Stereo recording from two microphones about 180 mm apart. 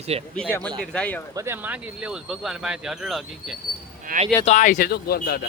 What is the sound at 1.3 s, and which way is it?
Speech, 15° right (ahead or behind).